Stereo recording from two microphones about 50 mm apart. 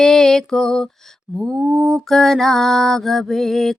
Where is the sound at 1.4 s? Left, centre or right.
Right.